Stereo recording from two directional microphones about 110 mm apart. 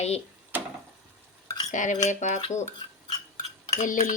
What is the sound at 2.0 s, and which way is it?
Speech, 90° left.